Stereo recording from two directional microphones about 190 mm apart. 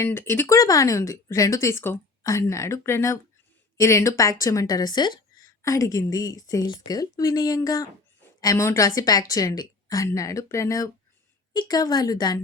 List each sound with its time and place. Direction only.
0.0 s a woman's voice: 10° left (ahead or behind)